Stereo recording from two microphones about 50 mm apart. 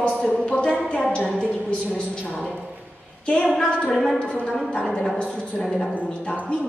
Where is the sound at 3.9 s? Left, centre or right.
Centre.